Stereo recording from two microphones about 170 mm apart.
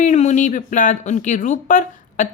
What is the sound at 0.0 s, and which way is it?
A woman's voice, 45° left (ahead or behind).